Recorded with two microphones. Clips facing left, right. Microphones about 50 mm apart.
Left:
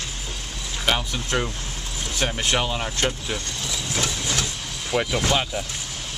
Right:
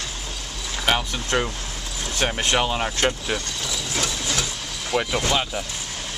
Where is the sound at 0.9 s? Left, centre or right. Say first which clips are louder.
Right 1 dB; centre.